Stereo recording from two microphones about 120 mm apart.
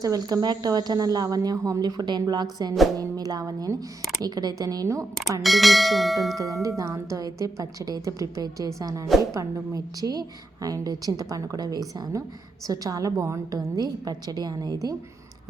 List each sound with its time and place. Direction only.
0.0 s a woman's voice: 30° right (ahead or behind)
5.4 s speech: centre (ahead or behind)
6.4 s a woman's voice: 30° right (ahead or behind)